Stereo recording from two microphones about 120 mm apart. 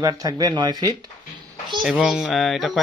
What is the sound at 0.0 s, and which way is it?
Speech, 30° right (ahead or behind).